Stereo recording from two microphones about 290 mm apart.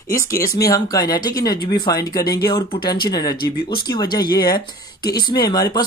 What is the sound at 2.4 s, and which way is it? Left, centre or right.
Speech, left.